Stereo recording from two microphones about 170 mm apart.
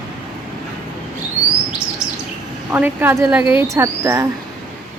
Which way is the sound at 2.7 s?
10° right (ahead or behind).